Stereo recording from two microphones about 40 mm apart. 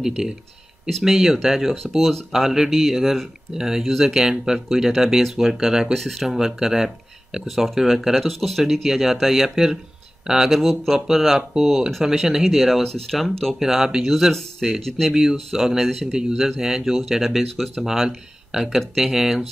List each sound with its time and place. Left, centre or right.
0.0 s speech: centre
3.5 s speech: centre
5.9 s speech: centre
6.3 s speech: centre
7.4 s speech: centre
12.8 s speech: centre
13.6 s speech: centre
16.1 s speech: centre
16.3 s speech: centre
18.5 s speech: centre